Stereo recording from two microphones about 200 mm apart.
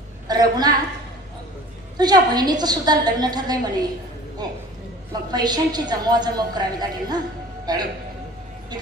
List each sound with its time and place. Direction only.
0.3 s a woman's voice: 20° right (ahead or behind)
2.0 s a woman's voice: 20° right (ahead or behind)